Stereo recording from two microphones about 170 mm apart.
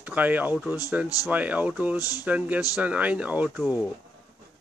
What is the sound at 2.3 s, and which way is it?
Speech, 10° right (ahead or behind).